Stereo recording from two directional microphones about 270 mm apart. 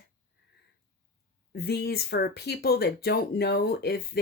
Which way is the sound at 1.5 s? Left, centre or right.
Left.